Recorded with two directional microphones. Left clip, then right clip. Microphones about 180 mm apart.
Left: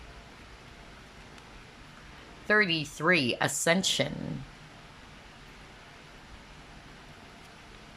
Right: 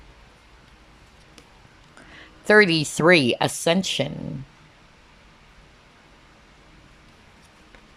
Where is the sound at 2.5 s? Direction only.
30° right (ahead or behind); by 4.1 s 10° right (ahead or behind).